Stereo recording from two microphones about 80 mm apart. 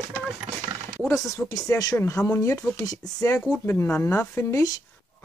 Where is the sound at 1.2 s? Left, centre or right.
Left.